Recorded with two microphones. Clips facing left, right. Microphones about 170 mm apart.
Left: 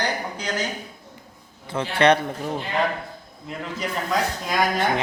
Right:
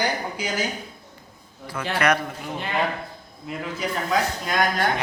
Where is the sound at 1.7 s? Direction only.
30° left (ahead or behind).